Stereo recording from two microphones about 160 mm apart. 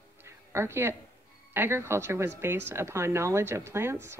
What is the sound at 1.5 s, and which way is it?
Speech, 15° right (ahead or behind).